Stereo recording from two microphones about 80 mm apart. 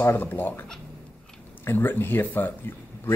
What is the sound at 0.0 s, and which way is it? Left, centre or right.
Speech, left.